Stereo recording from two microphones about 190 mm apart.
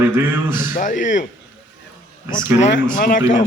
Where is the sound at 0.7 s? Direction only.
45° left (ahead or behind).